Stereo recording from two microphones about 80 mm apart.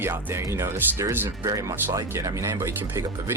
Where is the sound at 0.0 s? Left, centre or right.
Right.